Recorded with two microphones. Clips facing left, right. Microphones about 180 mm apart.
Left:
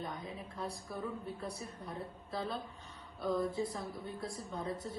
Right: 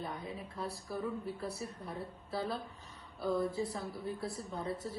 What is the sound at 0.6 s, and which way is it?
Speech, centre (ahead or behind).